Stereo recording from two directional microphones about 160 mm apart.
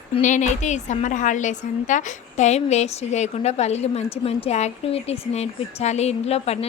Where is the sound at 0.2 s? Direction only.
50° left (ahead or behind).